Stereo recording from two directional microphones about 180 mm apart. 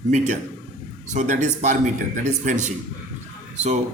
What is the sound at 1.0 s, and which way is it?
Speech, 45° right (ahead or behind).